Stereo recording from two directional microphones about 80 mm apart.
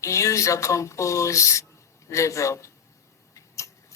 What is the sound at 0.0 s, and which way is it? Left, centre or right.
Speech, left.